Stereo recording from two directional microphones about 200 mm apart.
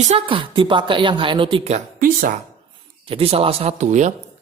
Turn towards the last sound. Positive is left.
turn(degrees=-35)  # may be behind; listen again after turning